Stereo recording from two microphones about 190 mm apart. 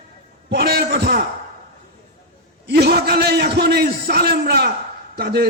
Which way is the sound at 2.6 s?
60° right (ahead or behind).